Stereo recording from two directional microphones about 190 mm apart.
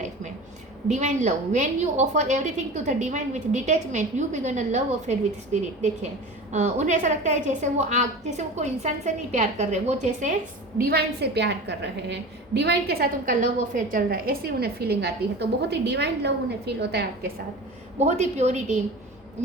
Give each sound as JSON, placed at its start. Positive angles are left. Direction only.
{"t": 0.9, "sound": "a woman's voice", "side_deg": -40}
{"t": 6.5, "sound": "a woman's voice", "side_deg": -40}
{"t": 10.8, "sound": "a woman's voice", "side_deg": -55}
{"t": 18.0, "sound": "a woman's voice", "side_deg": -35}